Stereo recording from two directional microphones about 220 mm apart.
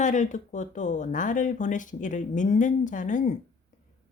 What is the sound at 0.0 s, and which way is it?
A woman's voice, 35° left (ahead or behind).